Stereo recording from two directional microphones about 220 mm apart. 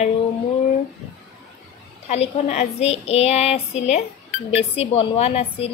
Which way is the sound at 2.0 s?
30° left (ahead or behind).